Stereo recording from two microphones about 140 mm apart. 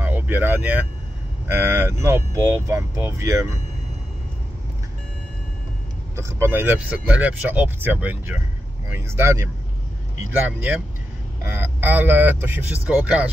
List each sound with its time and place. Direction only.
0.0 s speech: 15° right (ahead or behind)
6.1 s speech: 20° right (ahead or behind)